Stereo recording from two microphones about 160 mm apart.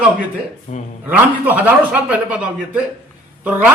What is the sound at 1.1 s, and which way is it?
A man's voice, 10° right (ahead or behind).